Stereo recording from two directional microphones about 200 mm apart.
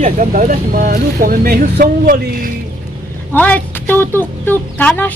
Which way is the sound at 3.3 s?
5° left (ahead or behind).